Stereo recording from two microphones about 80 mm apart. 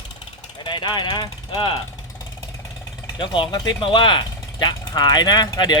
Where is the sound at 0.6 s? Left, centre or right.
Left.